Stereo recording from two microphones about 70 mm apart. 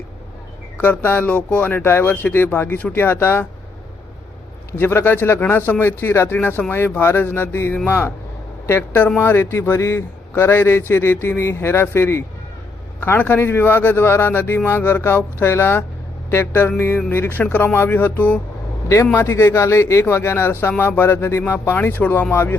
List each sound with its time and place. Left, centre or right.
0.8 s speech: left
4.8 s speech: left
19.1 s speech: left